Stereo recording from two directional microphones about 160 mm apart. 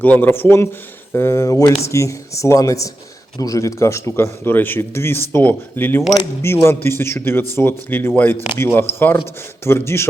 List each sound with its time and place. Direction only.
0.0 s a man's voice: 10° left (ahead or behind)